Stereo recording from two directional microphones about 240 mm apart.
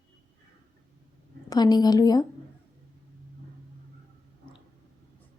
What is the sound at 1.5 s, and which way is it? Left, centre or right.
Speech, centre.